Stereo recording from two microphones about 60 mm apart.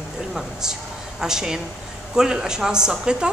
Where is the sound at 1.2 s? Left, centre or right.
Centre.